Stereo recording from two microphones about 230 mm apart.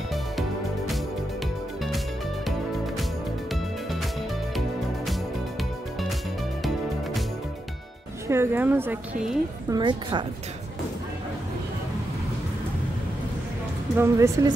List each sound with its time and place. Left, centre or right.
0.1 s music: centre
5.6 s music: centre
8.3 s a woman's voice: centre
9.7 s a woman's voice: centre
13.9 s a woman's voice: centre